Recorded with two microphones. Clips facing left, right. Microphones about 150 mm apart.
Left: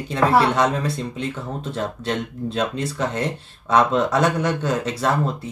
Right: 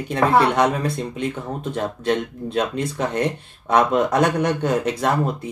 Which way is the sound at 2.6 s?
10° right (ahead or behind).